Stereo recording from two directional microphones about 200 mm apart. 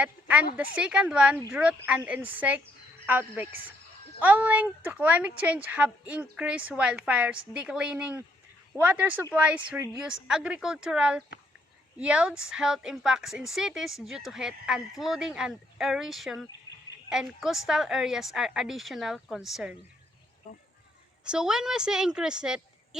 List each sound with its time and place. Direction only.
0.0 s a woman's voice: 5° right (ahead or behind)
21.2 s speech: 5° right (ahead or behind)